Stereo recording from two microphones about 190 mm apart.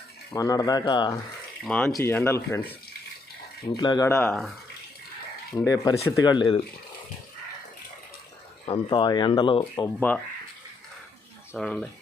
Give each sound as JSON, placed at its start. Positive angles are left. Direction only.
{"t": 0.3, "sound": "speech", "side_deg": 20}
{"t": 1.6, "sound": "speech", "side_deg": 5}
{"t": 3.8, "sound": "speech", "side_deg": 20}
{"t": 5.5, "sound": "speech", "side_deg": 20}
{"t": 8.6, "sound": "speech", "side_deg": 25}
{"t": 9.7, "sound": "speech", "side_deg": 10}
{"t": 11.5, "sound": "speech", "side_deg": 5}